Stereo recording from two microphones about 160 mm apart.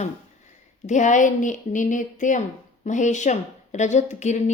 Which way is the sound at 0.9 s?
50° left (ahead or behind).